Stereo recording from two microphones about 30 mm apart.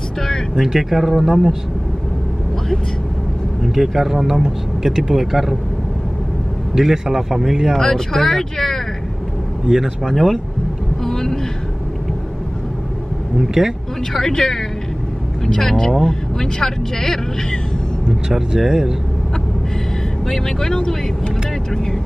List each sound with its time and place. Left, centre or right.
0.6 s speech: centre
3.7 s a man's voice: centre
6.7 s a man's voice: centre
7.7 s speech: centre
9.7 s a man's voice: centre
10.0 s speech: centre
11.1 s vehicle: centre
13.4 s a man's voice: centre
14.2 s speech: left
18.6 s a man's voice: centre
20.2 s speech: centre